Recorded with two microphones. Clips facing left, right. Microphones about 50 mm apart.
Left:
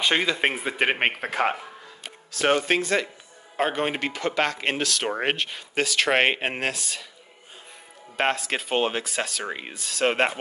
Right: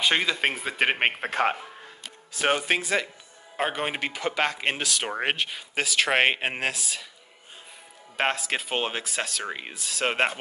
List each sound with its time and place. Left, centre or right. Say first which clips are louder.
0.0 s speech: left 1 dB; centre
2.3 s speech: left 3 dB; centre
8.2 s speech: left 2 dB; centre